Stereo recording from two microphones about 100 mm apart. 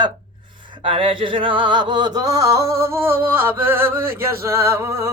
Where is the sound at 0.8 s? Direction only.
60° right (ahead or behind); by 5.1 s 25° right (ahead or behind).